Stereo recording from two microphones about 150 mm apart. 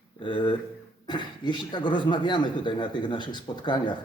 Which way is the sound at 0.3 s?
35° left (ahead or behind).